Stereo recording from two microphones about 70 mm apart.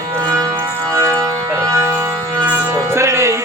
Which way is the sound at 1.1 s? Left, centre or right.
Right.